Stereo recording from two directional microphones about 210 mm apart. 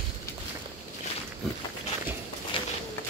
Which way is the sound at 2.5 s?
25° left (ahead or behind).